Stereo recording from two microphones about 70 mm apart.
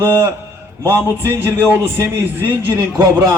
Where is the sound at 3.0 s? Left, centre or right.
Right.